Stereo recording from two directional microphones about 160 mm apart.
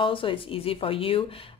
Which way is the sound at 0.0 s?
35° left (ahead or behind).